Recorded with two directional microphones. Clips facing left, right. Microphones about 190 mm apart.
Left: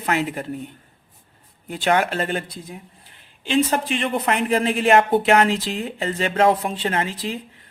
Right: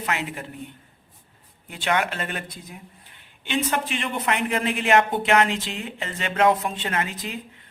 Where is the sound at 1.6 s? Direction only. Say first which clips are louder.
Left 5 dB; 40° left (ahead or behind).